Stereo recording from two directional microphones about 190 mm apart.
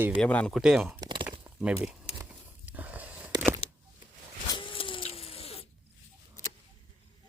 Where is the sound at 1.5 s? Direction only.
5° right (ahead or behind).